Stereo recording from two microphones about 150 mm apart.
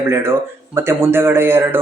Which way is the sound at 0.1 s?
15° right (ahead or behind).